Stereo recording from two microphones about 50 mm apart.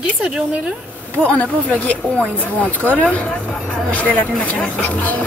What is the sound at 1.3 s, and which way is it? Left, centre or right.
Speech, left.